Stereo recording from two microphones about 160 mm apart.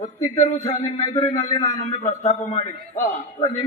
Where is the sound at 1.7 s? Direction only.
45° left (ahead or behind).